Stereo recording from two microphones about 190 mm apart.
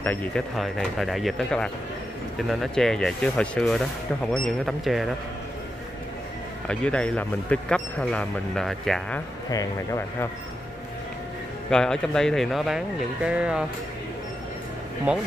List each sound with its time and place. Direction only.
0.0 s speech: 10° left (ahead or behind)
6.7 s speech: 5° left (ahead or behind)
9.5 s speech: 20° left (ahead or behind)
11.7 s speech: 5° left (ahead or behind)
15.1 s speech: 5° right (ahead or behind)